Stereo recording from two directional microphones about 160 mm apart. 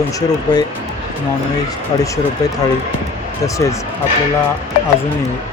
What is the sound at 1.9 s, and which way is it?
Speech, 25° left (ahead or behind).